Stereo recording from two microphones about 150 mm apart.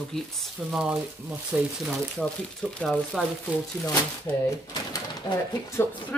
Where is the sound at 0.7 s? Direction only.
5° right (ahead or behind).